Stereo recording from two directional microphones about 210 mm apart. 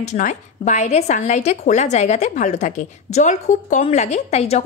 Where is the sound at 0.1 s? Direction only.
35° left (ahead or behind).